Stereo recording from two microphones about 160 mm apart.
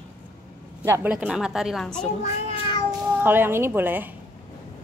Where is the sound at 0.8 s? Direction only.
15° right (ahead or behind).